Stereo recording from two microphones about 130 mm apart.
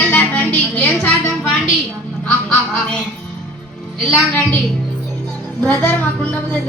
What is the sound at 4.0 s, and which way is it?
Speech, 5° left (ahead or behind).